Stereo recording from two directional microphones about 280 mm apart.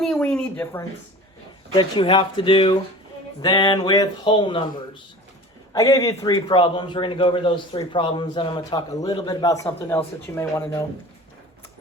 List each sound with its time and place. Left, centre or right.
0.0 s a man's voice: centre
5.7 s a man's voice: centre